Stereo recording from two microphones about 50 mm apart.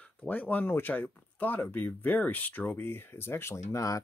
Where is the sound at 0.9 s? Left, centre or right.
Left.